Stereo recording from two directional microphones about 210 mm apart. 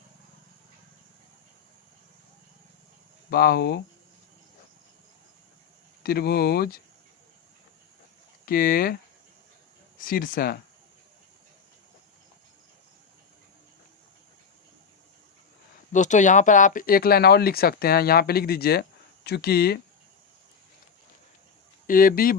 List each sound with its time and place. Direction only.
3.2 s speech: 50° left (ahead or behind)
6.0 s speech: 45° left (ahead or behind)
8.4 s speech: 45° left (ahead or behind)
10.1 s speech: 45° left (ahead or behind)
15.9 s speech: 35° left (ahead or behind)
21.8 s speech: 40° left (ahead or behind)